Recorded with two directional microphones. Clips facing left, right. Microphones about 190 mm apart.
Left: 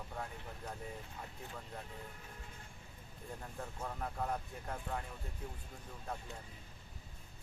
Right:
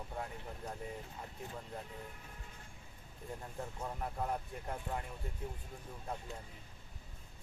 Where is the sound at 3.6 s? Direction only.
15° right (ahead or behind).